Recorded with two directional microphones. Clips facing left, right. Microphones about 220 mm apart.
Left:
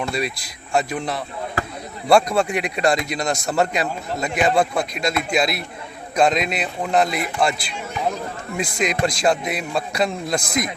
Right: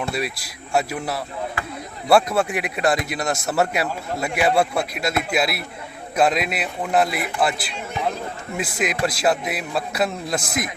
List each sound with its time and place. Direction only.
0.0 s speech: 5° right (ahead or behind)
1.6 s basketball bounce: 40° left (ahead or behind)
2.0 s speech: 5° right (ahead or behind)